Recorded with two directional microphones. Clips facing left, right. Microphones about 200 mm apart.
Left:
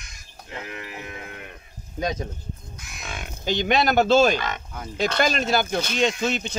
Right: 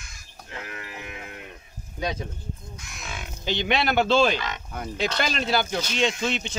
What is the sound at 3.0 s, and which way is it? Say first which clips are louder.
Speech: left 3 dB; 55° left (ahead or behind).